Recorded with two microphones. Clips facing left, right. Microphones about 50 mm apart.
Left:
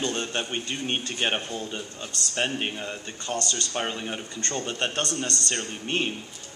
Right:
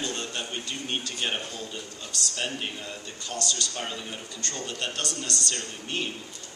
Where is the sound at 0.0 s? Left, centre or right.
Left.